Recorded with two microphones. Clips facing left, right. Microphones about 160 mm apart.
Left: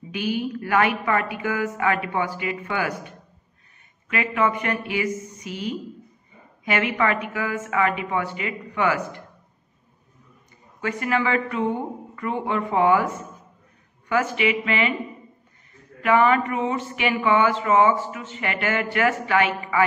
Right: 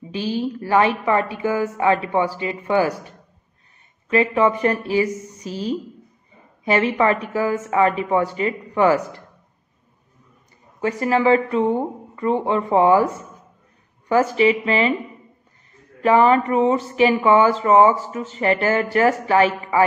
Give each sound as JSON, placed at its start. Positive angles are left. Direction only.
{"t": 0.1, "sound": "speech", "side_deg": -30}
{"t": 10.8, "sound": "speech", "side_deg": -35}
{"t": 16.0, "sound": "speech", "side_deg": -35}